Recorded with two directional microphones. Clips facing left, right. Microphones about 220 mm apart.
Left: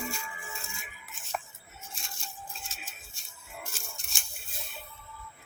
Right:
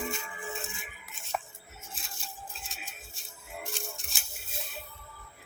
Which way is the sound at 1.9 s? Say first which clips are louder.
Even; centre (ahead or behind).